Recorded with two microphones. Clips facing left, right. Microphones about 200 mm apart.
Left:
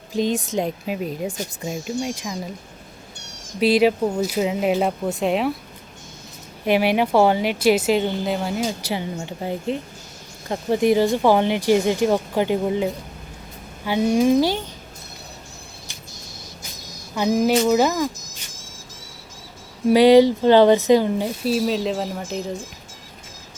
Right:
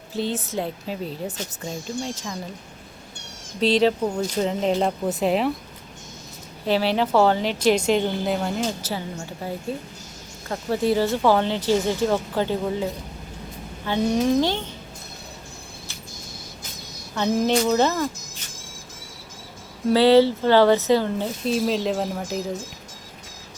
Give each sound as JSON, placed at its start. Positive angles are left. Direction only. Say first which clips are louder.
{"t": 0.1, "sound": "a woman's voice", "louder": "left 5 dB", "side_deg": 15}
{"t": 3.6, "sound": "a woman's voice", "louder": "left 2 dB", "side_deg": 10}
{"t": 6.7, "sound": "a woman's voice", "louder": "left 3 dB", "side_deg": 15}
{"t": 17.2, "sound": "a woman's voice", "louder": "left 2 dB", "side_deg": 10}
{"t": 19.9, "sound": "a woman's voice", "louder": "left 3 dB", "side_deg": 15}